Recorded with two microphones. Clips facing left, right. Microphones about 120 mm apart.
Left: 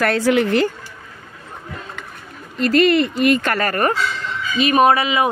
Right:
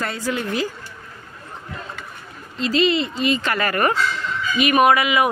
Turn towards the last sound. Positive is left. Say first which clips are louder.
# left 1 dB
turn(degrees=30)  # may be behind; listen again after turning